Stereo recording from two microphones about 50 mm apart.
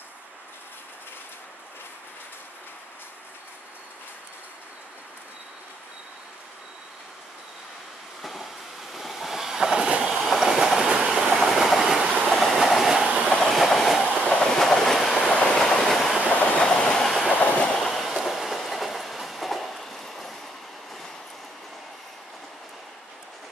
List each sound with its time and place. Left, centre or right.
8.2 s train: centre
10.0 s train: centre
14.0 s train: left
16.2 s train: left
17.0 s train: centre
17.4 s train: left
17.7 s train: centre